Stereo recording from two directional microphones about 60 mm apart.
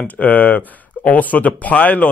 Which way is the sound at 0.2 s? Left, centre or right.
Left.